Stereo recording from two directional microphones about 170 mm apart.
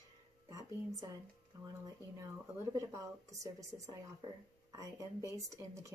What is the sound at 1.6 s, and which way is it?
A woman's voice, 20° right (ahead or behind).